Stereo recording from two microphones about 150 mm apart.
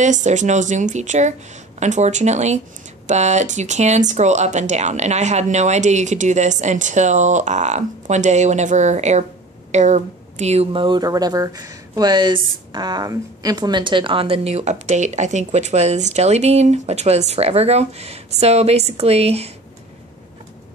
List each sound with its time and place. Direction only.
0.0 s speech: 55° right (ahead or behind)